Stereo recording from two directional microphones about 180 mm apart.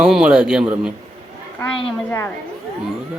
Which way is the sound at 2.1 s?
10° left (ahead or behind).